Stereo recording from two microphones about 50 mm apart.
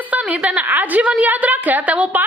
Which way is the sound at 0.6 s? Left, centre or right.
Right.